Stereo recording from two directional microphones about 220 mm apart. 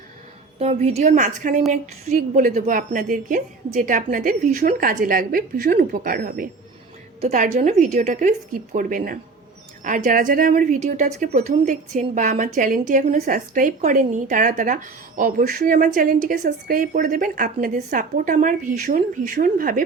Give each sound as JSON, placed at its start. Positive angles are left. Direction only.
{"t": 0.6, "sound": "a woman's voice", "side_deg": -30}